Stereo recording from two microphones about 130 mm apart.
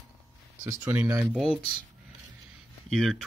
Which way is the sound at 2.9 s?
Centre (ahead or behind).